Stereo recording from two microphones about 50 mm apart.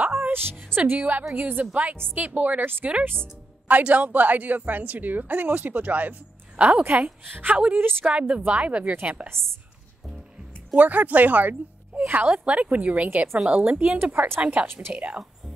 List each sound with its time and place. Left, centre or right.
0.1 s music: right
0.7 s a woman's voice: right
10.8 s a woman's voice: right
14.1 s a woman's voice: right
14.4 s a woman's voice: right